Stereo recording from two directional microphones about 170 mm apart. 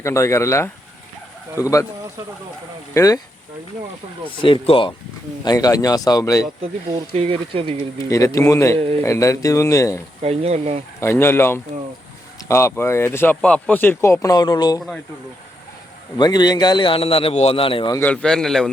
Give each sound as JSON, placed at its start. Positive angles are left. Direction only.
{"t": 0.0, "sound": "a man's voice", "side_deg": 15}
{"t": 2.9, "sound": "speech", "side_deg": 20}
{"t": 4.3, "sound": "a man's voice", "side_deg": 30}
{"t": 5.5, "sound": "a man's voice", "side_deg": 20}
{"t": 6.6, "sound": "speech", "side_deg": -40}
{"t": 8.1, "sound": "speech", "side_deg": 20}
{"t": 10.2, "sound": "speech", "side_deg": -40}
{"t": 11.0, "sound": "speech", "side_deg": 15}
{"t": 16.1, "sound": "a man's voice", "side_deg": 25}
{"t": 17.9, "sound": "a man's voice", "side_deg": 10}